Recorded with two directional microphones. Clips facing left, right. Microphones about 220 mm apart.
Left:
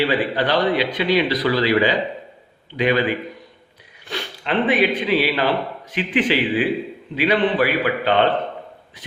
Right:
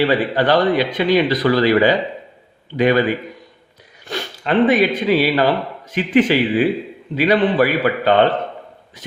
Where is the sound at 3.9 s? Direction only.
45° right (ahead or behind).